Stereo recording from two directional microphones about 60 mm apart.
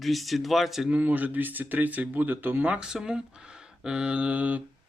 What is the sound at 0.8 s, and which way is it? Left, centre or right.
Speech, right.